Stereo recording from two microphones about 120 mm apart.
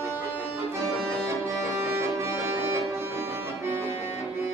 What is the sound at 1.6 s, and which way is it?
Music, 20° right (ahead or behind).